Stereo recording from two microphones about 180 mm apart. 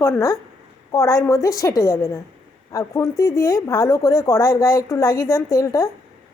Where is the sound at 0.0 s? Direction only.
20° left (ahead or behind).